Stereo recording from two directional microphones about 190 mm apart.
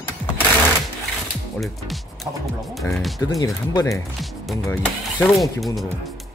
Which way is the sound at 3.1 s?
20° left (ahead or behind).